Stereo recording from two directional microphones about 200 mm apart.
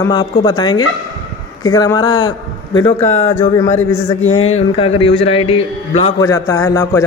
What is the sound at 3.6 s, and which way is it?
A man's voice, 35° left (ahead or behind).